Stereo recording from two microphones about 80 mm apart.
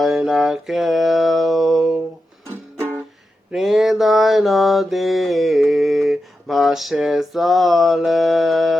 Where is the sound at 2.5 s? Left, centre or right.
Right.